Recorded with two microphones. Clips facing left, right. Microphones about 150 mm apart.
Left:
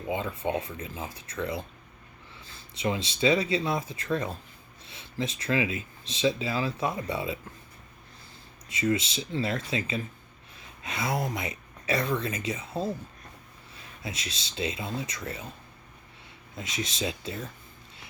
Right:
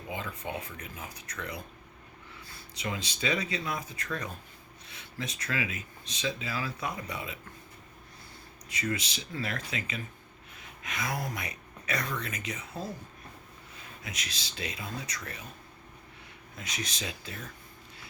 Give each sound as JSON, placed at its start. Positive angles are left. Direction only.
{"t": 0.1, "sound": "speech", "side_deg": 25}
{"t": 2.7, "sound": "speech", "side_deg": 25}
{"t": 8.7, "sound": "speech", "side_deg": 25}
{"t": 14.0, "sound": "speech", "side_deg": 25}
{"t": 16.6, "sound": "speech", "side_deg": 25}